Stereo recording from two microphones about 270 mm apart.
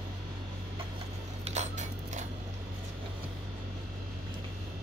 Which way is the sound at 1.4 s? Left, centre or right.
Right.